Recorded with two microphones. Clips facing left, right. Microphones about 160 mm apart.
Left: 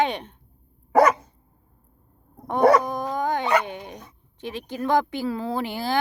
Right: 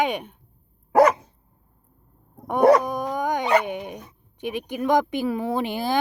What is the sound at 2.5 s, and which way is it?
Dog, 10° right (ahead or behind).